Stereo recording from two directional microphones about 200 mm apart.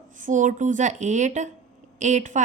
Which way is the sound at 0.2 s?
40° right (ahead or behind).